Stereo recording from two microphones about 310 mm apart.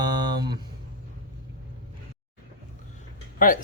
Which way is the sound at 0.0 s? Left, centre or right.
Centre.